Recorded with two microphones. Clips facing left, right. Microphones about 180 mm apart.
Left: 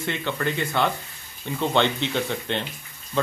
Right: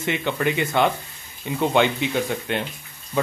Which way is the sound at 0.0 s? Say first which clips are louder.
Right 3 dB; 15° right (ahead or behind).